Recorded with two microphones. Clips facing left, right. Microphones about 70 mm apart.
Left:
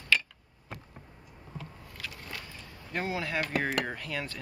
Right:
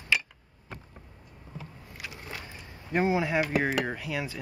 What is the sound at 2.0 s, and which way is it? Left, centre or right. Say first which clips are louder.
Vehicle: right 1 dB; centre.